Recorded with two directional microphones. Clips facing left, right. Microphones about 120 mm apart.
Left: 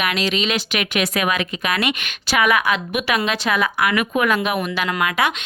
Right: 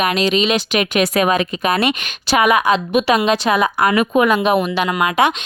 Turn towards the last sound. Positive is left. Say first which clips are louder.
# right 5 dB
turn(degrees=-25)  # may be behind; listen again after turning